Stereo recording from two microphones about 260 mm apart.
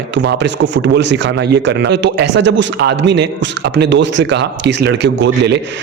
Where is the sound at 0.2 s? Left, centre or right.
Right.